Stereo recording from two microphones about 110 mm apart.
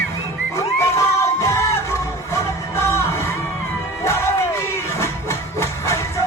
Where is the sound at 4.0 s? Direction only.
25° left (ahead or behind).